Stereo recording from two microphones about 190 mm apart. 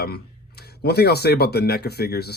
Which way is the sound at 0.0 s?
55° left (ahead or behind).